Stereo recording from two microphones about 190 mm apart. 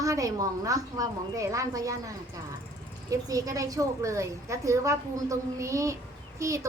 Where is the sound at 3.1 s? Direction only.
20° right (ahead or behind).